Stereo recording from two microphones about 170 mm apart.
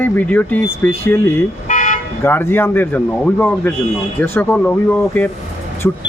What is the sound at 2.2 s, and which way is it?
Speech, 15° left (ahead or behind).